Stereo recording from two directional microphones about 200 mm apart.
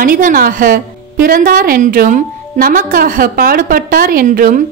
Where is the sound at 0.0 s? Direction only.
45° right (ahead or behind).